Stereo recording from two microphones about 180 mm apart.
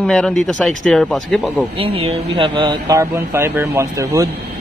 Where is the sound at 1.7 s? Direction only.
30° right (ahead or behind).